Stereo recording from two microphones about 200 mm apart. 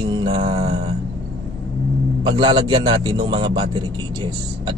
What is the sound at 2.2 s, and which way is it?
Speech, 25° right (ahead or behind).